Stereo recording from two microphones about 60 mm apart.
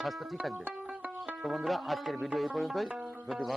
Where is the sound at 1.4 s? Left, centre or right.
Centre.